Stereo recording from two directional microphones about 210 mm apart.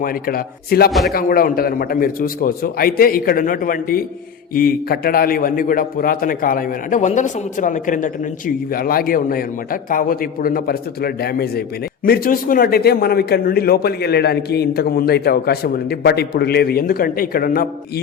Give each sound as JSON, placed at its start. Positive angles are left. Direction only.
{"t": 0.0, "sound": "a man's voice", "side_deg": 45}
{"t": 0.9, "sound": "speech", "side_deg": 0}
{"t": 1.1, "sound": "a man's voice", "side_deg": 45}